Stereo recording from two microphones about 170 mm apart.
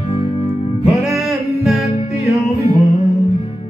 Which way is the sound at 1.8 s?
40° left (ahead or behind).